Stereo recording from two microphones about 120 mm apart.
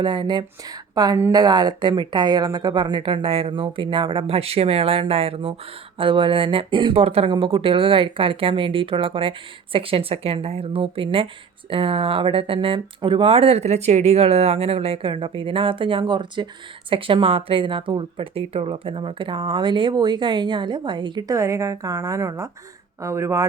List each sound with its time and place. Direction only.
0.0 s a woman's voice: 40° right (ahead or behind); by 23.5 s 25° right (ahead or behind)